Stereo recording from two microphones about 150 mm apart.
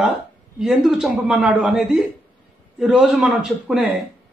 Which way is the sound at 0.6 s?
5° right (ahead or behind).